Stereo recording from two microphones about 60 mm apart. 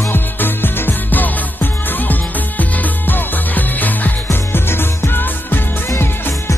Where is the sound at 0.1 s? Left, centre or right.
Left.